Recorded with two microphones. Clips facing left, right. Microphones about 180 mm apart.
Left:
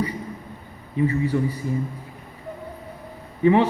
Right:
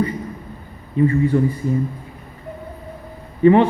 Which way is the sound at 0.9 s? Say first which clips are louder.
Right 5 dB; 50° right (ahead or behind).